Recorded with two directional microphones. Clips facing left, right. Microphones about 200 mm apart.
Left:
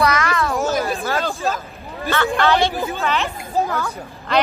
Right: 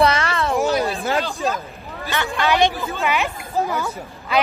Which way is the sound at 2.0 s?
15° right (ahead or behind).